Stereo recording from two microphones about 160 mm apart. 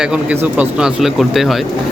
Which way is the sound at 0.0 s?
10° right (ahead or behind).